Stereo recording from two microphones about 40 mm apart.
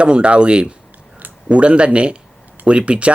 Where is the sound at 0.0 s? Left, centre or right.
Right.